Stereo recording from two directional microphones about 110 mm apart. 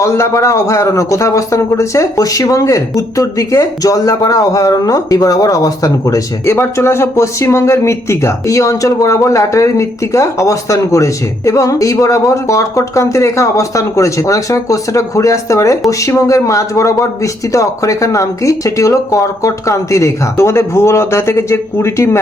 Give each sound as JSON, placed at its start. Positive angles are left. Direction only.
{"t": 0.0, "sound": "a man's voice", "side_deg": 25}